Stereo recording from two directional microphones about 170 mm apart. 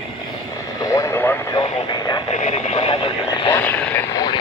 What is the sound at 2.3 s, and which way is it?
Radio, 40° left (ahead or behind).